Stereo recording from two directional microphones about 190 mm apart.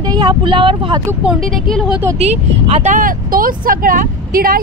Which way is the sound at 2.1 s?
35° right (ahead or behind).